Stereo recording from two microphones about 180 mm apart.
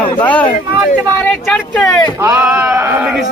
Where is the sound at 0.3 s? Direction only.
10° left (ahead or behind).